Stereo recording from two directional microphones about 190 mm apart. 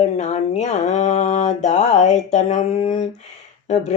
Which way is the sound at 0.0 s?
35° left (ahead or behind).